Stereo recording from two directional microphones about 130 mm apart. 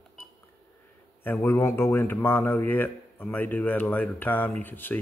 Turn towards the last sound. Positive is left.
turn(degrees=15)  # may be behind; listen again after turning